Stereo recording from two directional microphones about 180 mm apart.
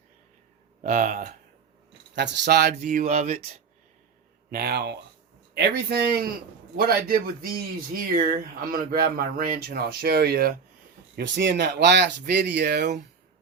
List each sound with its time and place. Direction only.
0.8 s speech: 45° right (ahead or behind)
2.1 s speech: 75° right (ahead or behind)
2.7 s speech: 45° right (ahead or behind)
4.5 s speech: 60° right (ahead or behind)
5.5 s speech: 75° right (ahead or behind); by 10.6 s 55° right (ahead or behind)
11.3 s speech: 70° right (ahead or behind)